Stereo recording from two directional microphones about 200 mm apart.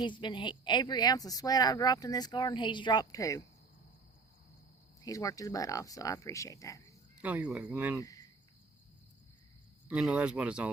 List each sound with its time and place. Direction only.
0.0 s speech: 25° left (ahead or behind)
5.0 s speech: 15° left (ahead or behind)
7.2 s speech: 5° right (ahead or behind)
8.0 s cricket: 15° left (ahead or behind)
9.9 s speech: 5° right (ahead or behind)